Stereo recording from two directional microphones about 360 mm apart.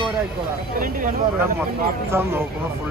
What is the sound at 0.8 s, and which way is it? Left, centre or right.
Speech, right.